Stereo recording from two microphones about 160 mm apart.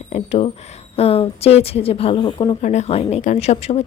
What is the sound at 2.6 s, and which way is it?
A woman's voice, 45° left (ahead or behind).